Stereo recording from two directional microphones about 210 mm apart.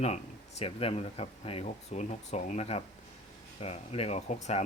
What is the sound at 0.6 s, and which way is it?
Speech, 25° left (ahead or behind).